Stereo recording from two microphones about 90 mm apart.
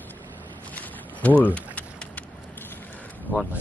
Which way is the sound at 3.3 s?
20° left (ahead or behind).